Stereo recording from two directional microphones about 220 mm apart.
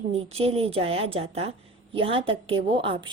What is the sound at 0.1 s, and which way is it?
A woman's voice, 30° right (ahead or behind).